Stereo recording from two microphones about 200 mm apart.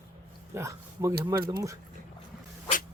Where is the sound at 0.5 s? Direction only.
15° right (ahead or behind).